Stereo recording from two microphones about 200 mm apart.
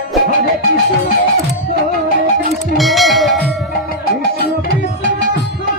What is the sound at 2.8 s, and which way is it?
Bell, centre (ahead or behind).